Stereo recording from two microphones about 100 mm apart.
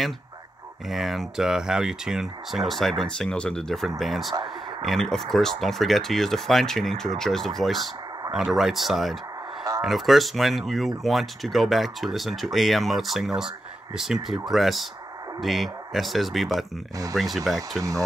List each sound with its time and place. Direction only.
0.8 s speech: centre (ahead or behind)
17.6 s speech: 35° right (ahead or behind)